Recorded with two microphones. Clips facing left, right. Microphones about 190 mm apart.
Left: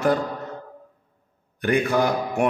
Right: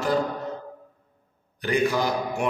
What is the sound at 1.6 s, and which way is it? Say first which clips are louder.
Speech: left 3 dB; 55° left (ahead or behind).